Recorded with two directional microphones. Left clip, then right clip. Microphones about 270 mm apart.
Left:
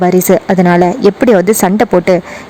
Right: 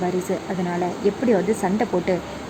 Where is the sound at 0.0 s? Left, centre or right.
Left.